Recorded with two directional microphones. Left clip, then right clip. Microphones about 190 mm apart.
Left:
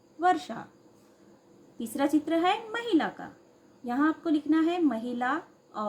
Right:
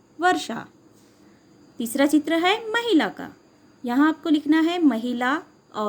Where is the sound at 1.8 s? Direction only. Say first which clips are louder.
Right 7 dB; 45° right (ahead or behind).